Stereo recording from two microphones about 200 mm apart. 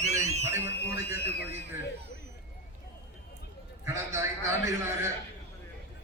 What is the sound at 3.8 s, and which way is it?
Speech, 15° right (ahead or behind).